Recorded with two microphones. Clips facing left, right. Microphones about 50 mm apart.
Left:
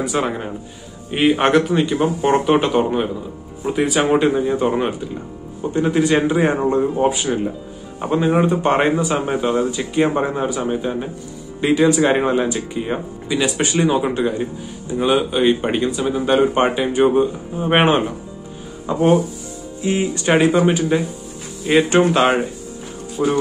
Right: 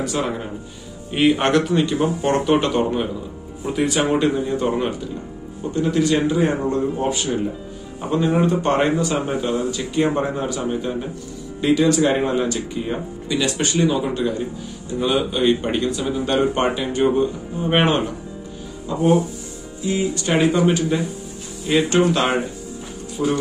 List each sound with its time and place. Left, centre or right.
0.0 s speech: centre
13.8 s speech: left
15.0 s speech: centre; by 20.3 s left
20.3 s speech: centre
23.2 s speech: left